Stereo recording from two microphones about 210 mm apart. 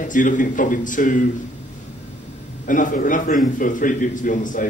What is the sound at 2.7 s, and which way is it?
A man's voice, 40° left (ahead or behind).